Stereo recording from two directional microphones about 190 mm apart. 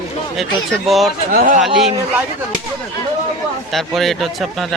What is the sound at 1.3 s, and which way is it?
Speech, 50° right (ahead or behind).